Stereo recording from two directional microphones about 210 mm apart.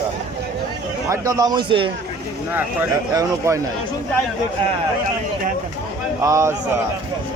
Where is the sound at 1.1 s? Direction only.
15° right (ahead or behind).